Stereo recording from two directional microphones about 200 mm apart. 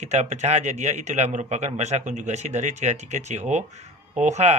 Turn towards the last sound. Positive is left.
turn(degrees=-35)  # may be behind; listen again after turning